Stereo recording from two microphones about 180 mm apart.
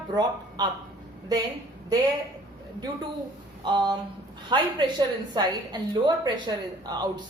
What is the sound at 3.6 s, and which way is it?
A woman's voice, 25° right (ahead or behind).